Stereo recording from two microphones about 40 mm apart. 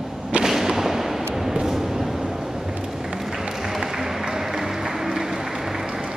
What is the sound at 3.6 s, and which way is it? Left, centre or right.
Music, centre.